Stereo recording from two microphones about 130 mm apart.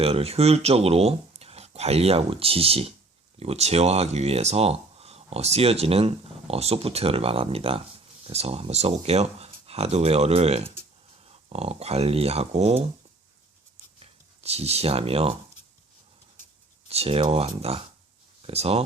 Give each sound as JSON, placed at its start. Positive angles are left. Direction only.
{"t": 0.0, "sound": "speech", "side_deg": -50}
{"t": 14.0, "sound": "speech", "side_deg": -50}
{"t": 16.9, "sound": "speech", "side_deg": -50}